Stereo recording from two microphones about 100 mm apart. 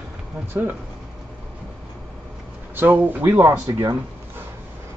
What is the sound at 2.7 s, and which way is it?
Speech, 20° right (ahead or behind).